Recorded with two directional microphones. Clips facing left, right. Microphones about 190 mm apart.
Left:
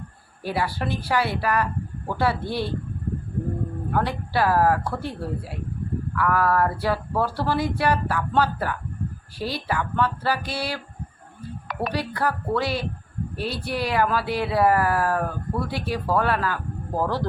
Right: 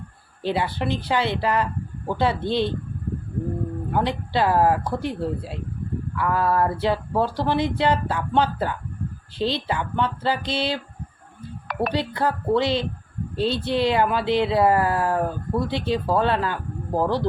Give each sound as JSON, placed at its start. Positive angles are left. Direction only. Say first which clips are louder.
{"t": 0.4, "sound": "speech", "louder": "right 2 dB", "side_deg": -20}
{"t": 3.9, "sound": "speech", "louder": "right 1 dB", "side_deg": -20}
{"t": 11.9, "sound": "speech", "louder": "right 1 dB", "side_deg": -20}